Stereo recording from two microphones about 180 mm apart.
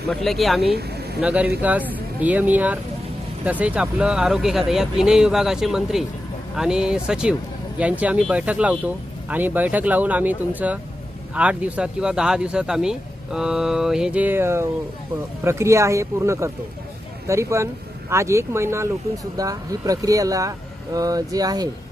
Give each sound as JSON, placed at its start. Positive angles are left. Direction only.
{"t": 0.1, "sound": "speech", "side_deg": 0}
{"t": 0.8, "sound": "vehicle", "side_deg": -60}
{"t": 1.2, "sound": "speech", "side_deg": -5}